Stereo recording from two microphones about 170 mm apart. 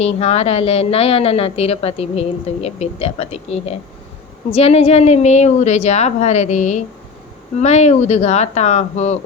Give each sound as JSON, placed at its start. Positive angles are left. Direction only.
{"t": 0.0, "sound": "speech", "side_deg": 40}